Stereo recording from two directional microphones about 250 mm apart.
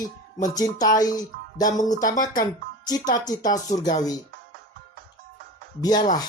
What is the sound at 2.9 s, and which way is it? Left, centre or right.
Speech, centre.